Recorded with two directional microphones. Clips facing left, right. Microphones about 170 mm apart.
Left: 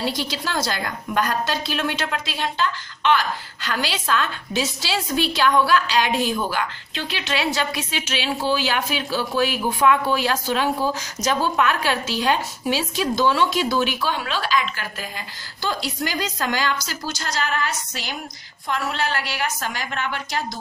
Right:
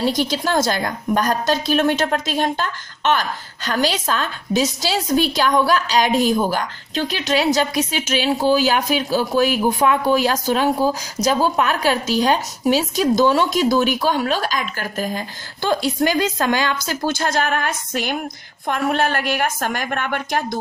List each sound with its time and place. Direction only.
0.0 s a woman's voice: 45° right (ahead or behind)